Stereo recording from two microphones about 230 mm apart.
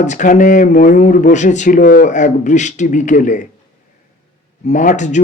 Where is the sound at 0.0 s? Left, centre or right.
Left.